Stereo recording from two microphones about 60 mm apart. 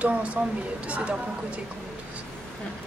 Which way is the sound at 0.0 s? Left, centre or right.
Right.